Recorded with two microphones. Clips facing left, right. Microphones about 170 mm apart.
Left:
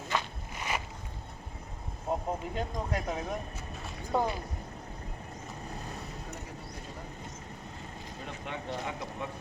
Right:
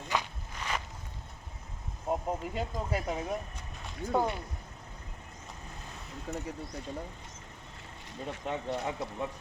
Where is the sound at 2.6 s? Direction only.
5° right (ahead or behind).